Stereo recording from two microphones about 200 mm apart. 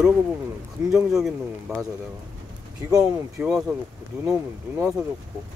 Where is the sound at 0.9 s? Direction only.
Centre (ahead or behind).